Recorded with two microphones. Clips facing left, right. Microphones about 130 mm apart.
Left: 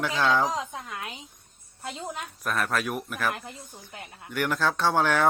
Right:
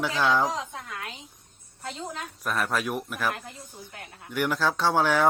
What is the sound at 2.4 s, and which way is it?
Speech, 5° right (ahead or behind).